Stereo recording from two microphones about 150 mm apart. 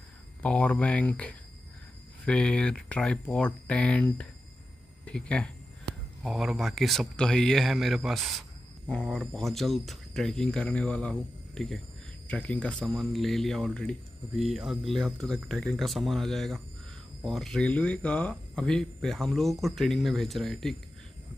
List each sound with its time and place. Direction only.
0.4 s speech: 10° left (ahead or behind)